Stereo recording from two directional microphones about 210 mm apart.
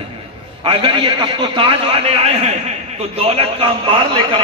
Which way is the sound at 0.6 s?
25° right (ahead or behind).